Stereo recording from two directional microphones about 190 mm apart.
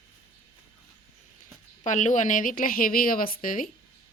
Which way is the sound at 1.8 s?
40° left (ahead or behind).